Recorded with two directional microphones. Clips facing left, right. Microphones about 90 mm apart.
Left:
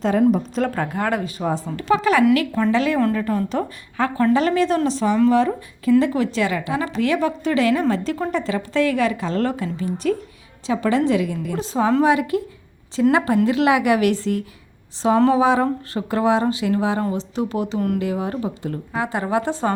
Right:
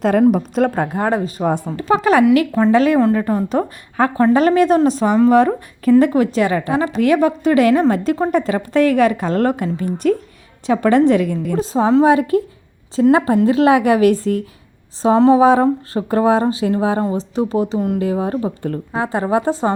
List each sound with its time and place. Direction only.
0.0 s a woman's voice: 60° right (ahead or behind)
0.7 s a woman's voice: 35° right (ahead or behind)
5.3 s a woman's voice: 50° right (ahead or behind)
6.0 s a woman's voice: 40° right (ahead or behind)
15.0 s a woman's voice: 30° right (ahead or behind)
15.4 s a woman's voice: 40° right (ahead or behind)